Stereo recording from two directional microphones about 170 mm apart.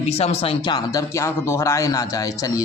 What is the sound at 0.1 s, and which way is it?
Speech, 35° left (ahead or behind).